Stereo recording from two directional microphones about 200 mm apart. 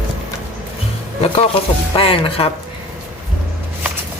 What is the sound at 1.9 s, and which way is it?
Speech, 25° left (ahead or behind).